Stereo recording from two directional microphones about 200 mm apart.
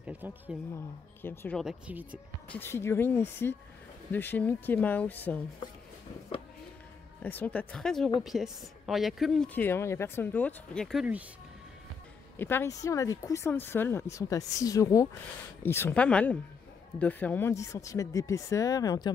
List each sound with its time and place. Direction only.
0.0 s speech: 10° right (ahead or behind)
1.2 s speech: 10° left (ahead or behind)
1.6 s speech: 5° right (ahead or behind)
2.5 s speech: 10° left (ahead or behind)
7.2 s speech: 10° left (ahead or behind)
12.4 s speech: 10° left (ahead or behind)